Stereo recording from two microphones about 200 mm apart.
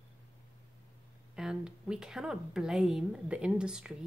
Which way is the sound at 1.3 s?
5° right (ahead or behind).